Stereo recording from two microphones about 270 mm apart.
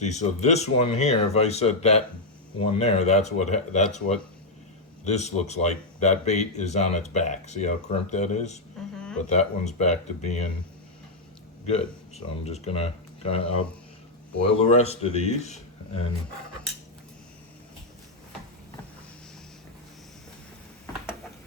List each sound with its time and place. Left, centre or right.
0.0 s speech: left
9.0 s a sound: centre
9.3 s speech: left
11.6 s speech: left
14.7 s speech: left